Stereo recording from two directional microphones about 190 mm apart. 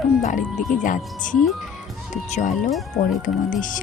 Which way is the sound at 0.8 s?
45° left (ahead or behind).